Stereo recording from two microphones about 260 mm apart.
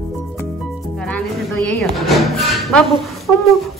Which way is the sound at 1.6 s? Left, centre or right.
Centre.